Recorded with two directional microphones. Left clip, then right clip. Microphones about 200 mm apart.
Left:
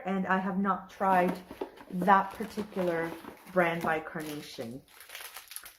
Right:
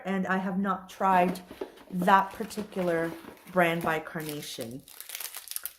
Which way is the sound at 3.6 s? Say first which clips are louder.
Right 2 dB; 35° right (ahead or behind).